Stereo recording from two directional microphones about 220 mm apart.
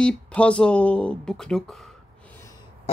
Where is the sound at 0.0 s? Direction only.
5° left (ahead or behind).